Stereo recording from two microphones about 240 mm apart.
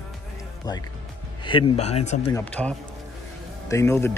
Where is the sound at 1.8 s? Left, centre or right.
Left.